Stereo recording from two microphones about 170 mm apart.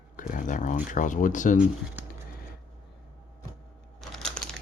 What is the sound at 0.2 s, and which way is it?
Speech, 50° left (ahead or behind).